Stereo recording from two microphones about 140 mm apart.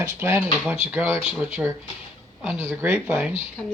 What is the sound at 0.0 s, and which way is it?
Speech, 15° right (ahead or behind).